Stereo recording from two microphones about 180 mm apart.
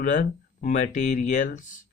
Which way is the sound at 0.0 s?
45° left (ahead or behind).